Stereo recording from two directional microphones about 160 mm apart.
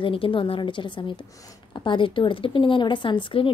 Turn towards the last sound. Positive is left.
turn(degrees=30)  # may be behind; listen again after turning